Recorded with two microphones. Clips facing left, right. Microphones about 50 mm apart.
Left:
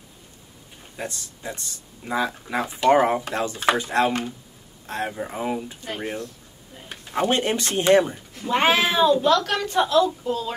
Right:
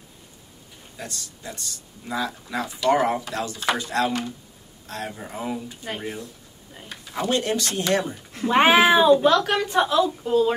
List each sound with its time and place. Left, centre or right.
0.9 s speech: left
6.9 s speech: left
8.5 s a woman's voice: centre